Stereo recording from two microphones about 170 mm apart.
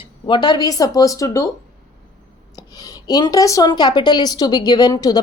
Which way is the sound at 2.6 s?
20° left (ahead or behind).